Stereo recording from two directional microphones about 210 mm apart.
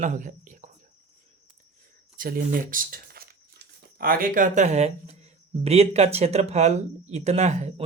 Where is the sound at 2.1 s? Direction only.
40° right (ahead or behind).